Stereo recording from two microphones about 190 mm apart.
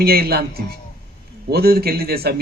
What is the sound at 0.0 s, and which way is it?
A man's voice, 55° right (ahead or behind).